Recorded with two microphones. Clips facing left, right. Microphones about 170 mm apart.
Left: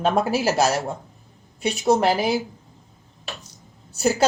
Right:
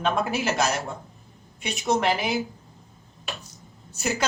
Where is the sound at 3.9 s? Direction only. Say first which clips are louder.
Left 7 dB; 35° left (ahead or behind).